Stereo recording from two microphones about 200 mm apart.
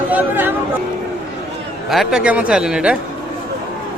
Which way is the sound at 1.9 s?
Centre (ahead or behind).